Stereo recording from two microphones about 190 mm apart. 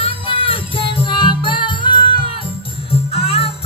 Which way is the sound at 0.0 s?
30° left (ahead or behind).